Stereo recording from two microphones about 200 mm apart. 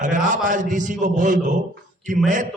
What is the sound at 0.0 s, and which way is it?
A man's voice, 40° right (ahead or behind).